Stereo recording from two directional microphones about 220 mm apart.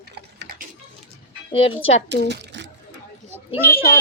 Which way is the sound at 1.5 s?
25° left (ahead or behind).